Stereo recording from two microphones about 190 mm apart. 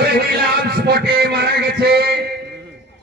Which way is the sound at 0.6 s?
55° right (ahead or behind).